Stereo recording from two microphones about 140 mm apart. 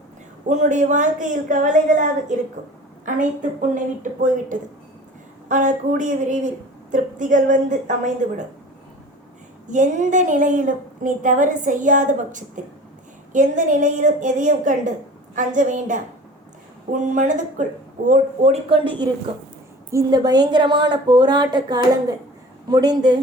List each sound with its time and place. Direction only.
0.4 s a woman's voice: 60° right (ahead or behind)
3.8 s a woman's voice: 65° right (ahead or behind)
9.6 s a woman's voice: 65° right (ahead or behind); by 19.0 s 40° right (ahead or behind)
19.9 s a woman's voice: 25° right (ahead or behind)